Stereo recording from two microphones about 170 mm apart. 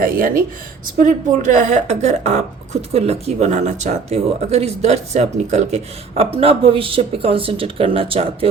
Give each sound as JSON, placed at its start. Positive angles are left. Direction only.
{"t": 0.0, "sound": "a woman's voice", "side_deg": -55}